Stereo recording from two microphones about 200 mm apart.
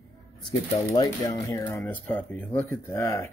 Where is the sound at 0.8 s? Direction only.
15° left (ahead or behind).